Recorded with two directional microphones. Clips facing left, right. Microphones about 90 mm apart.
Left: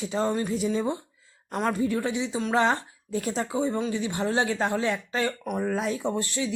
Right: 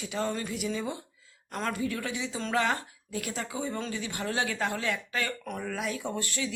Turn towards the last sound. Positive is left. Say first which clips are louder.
# left 5 dB
turn(degrees=25)  # may be behind; listen again after turning